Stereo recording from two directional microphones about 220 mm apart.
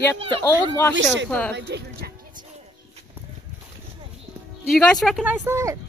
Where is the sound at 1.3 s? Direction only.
5° left (ahead or behind).